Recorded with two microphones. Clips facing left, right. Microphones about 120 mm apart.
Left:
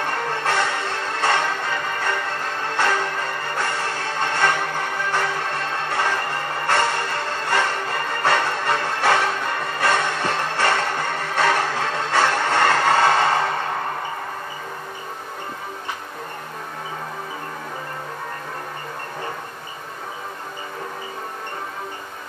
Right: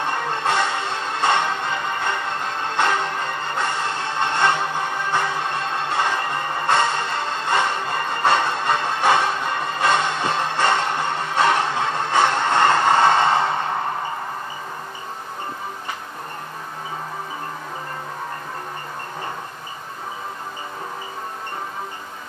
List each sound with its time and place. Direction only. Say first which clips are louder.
0.0 s music: right 1 dB; 20° right (ahead or behind)